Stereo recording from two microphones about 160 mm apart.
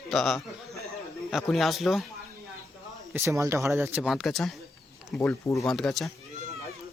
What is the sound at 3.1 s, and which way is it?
Speech, 20° right (ahead or behind).